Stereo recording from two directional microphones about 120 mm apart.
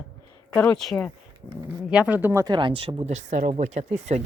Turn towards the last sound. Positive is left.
turn(degrees=-70)  # may be behind; listen again after turning